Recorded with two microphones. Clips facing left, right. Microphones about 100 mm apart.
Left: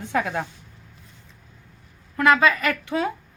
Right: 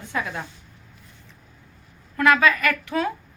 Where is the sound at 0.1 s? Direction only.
65° left (ahead or behind).